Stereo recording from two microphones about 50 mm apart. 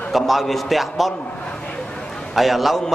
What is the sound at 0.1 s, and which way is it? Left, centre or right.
A man's voice, centre.